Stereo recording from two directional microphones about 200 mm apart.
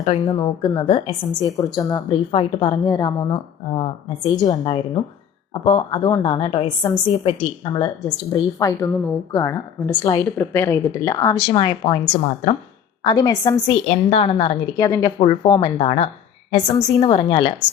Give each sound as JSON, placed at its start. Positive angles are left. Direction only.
{"t": 0.0, "sound": "a woman's voice", "side_deg": 25}
{"t": 13.1, "sound": "a woman's voice", "side_deg": 20}
{"t": 14.1, "sound": "a woman's voice", "side_deg": 30}
{"t": 14.8, "sound": "a woman's voice", "side_deg": 15}